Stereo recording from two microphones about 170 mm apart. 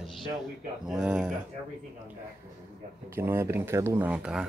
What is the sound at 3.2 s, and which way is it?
Speech, 15° right (ahead or behind).